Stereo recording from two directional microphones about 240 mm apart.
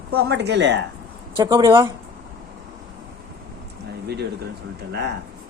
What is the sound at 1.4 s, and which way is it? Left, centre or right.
Speech, centre.